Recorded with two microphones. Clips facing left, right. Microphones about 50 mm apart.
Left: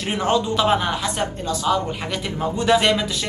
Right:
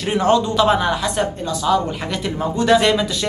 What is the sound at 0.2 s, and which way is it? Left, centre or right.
Speech, centre.